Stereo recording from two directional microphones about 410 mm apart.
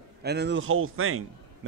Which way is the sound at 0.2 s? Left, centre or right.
Right.